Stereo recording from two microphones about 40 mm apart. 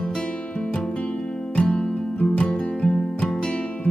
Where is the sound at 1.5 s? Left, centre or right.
Left.